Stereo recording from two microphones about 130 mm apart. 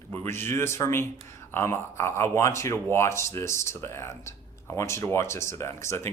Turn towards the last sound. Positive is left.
turn(degrees=20)  # may be behind; listen again after turning